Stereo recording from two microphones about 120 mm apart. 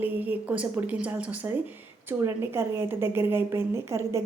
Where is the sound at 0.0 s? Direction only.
15° right (ahead or behind).